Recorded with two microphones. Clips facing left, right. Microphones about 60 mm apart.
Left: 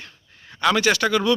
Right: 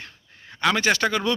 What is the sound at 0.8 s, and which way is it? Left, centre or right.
Speech, right.